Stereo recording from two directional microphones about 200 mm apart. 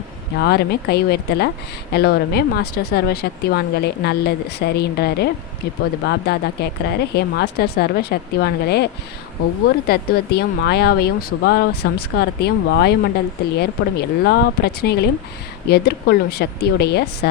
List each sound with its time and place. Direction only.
0.3 s a woman's voice: 55° left (ahead or behind)